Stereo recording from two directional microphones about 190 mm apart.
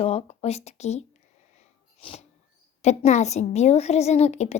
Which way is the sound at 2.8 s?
35° left (ahead or behind).